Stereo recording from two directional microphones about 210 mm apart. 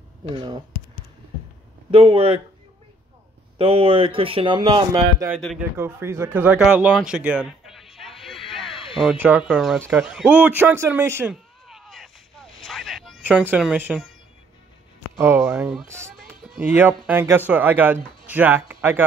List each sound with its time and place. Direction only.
1.9 s speech: 25° right (ahead or behind)
3.5 s speech: 25° right (ahead or behind)
5.4 s speech: centre (ahead or behind)
5.8 s speech: 10° right (ahead or behind)
8.6 s a sound: 25° left (ahead or behind)
9.0 s speech: 10° right (ahead or behind)
11.6 s a sound: centre (ahead or behind)
13.5 s speech: 5° right (ahead or behind)
15.1 s speech: 10° right (ahead or behind)